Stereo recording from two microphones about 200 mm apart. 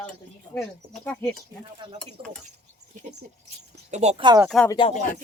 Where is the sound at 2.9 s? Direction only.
40° right (ahead or behind); by 4.4 s 25° right (ahead or behind).